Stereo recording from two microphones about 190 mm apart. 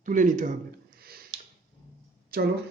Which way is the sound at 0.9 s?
55° right (ahead or behind).